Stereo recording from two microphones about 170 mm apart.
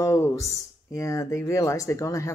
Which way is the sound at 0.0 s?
15° left (ahead or behind).